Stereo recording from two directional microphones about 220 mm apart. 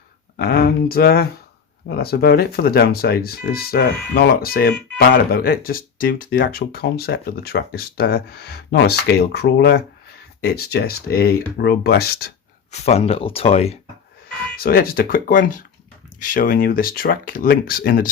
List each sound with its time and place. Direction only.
0.3 s speech: 45° left (ahead or behind)
12.7 s speech: 30° left (ahead or behind)
14.5 s speech: 45° left (ahead or behind)